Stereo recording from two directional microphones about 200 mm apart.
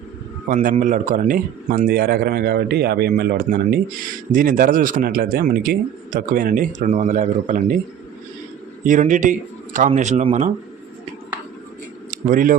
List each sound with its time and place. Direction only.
0.4 s speech: 45° right (ahead or behind)
8.8 s speech: 40° right (ahead or behind)
12.1 s speech: 40° right (ahead or behind)